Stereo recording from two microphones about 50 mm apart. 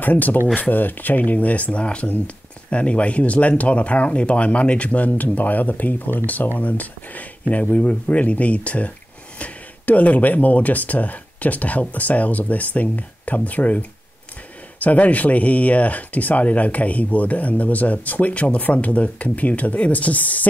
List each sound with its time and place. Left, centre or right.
0.0 s speech: left